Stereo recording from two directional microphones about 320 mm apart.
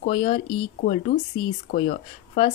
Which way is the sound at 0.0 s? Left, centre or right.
Centre.